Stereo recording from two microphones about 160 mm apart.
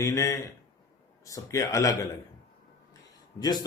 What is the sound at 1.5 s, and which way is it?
Speech, 20° left (ahead or behind).